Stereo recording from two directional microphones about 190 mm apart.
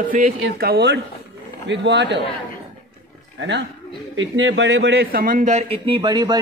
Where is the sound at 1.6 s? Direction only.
65° right (ahead or behind).